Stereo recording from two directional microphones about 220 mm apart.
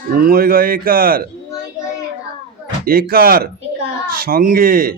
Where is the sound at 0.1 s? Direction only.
40° right (ahead or behind).